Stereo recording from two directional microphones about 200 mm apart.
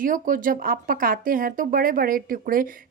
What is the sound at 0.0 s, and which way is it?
Speech, 45° right (ahead or behind).